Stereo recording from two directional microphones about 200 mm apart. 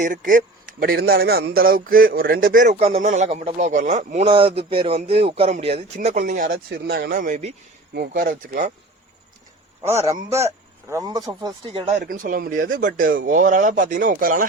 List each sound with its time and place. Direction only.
0.0 s a man's voice: 40° right (ahead or behind)
6.7 s speech: 50° right (ahead or behind)
10.8 s a man's voice: 15° right (ahead or behind)
11.9 s speech: 45° right (ahead or behind)